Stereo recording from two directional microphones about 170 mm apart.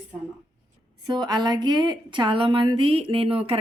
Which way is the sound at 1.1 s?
25° right (ahead or behind).